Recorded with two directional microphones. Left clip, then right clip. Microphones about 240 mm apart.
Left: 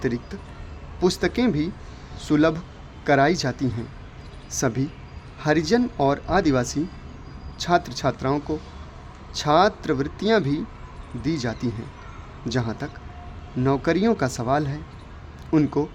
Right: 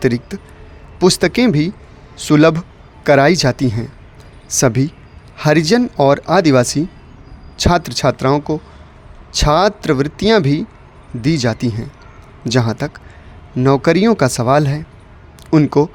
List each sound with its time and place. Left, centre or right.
0.0 s a man's voice: right